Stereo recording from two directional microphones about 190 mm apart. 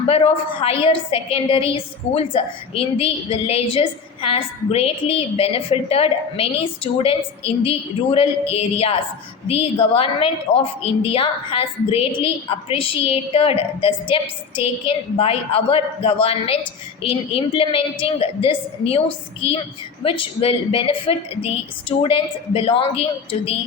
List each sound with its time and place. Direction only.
0.1 s a woman's voice: 30° left (ahead or behind)